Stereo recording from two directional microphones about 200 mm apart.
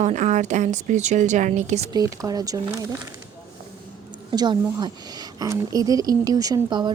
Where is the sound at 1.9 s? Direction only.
15° right (ahead or behind).